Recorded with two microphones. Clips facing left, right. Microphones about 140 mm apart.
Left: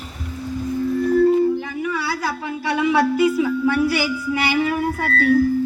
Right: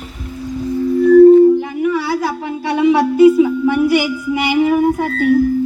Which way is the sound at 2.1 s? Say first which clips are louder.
Right 6 dB; 20° right (ahead or behind).